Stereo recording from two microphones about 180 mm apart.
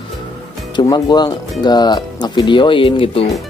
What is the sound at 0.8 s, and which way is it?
Speech, 20° left (ahead or behind).